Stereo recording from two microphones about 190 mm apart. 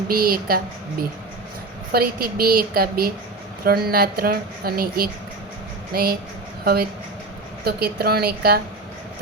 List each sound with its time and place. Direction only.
0.1 s a woman's voice: 50° right (ahead or behind)
7.6 s a woman's voice: 55° right (ahead or behind)